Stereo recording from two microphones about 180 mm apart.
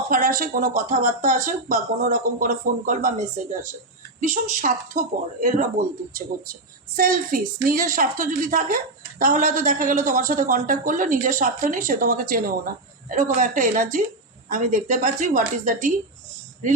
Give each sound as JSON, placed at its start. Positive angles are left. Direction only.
{"t": 0.1, "sound": "speech", "side_deg": -50}